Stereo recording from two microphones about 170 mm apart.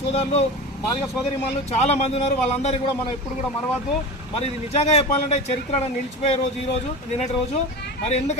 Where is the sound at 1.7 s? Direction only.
40° left (ahead or behind).